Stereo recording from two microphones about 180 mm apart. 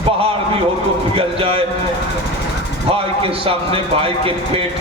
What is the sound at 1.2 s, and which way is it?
Speech, 30° right (ahead or behind).